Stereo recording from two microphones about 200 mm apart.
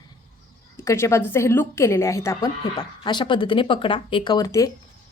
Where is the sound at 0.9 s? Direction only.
15° left (ahead or behind).